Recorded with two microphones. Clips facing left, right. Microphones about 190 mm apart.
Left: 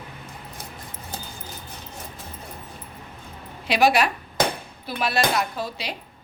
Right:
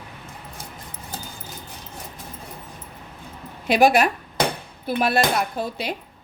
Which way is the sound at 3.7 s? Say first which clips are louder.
Right 3 dB; 50° right (ahead or behind).